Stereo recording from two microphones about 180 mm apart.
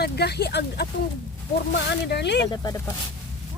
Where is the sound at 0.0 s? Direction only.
65° left (ahead or behind).